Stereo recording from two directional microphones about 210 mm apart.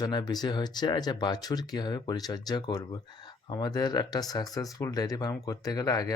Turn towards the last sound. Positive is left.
turn(degrees=15)  # may be behind; listen again after turning